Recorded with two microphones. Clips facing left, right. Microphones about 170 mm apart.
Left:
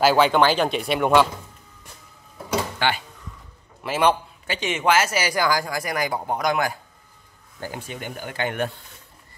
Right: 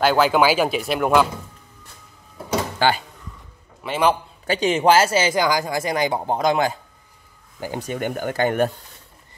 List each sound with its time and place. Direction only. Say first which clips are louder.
0.0 s speech: even; centre (ahead or behind)
2.8 s speech: right 6 dB; 35° right (ahead or behind)
3.8 s speech: right 1 dB; centre (ahead or behind)
4.5 s speech: right 5 dB; 35° right (ahead or behind)
7.8 s speech: right 8 dB; 50° right (ahead or behind)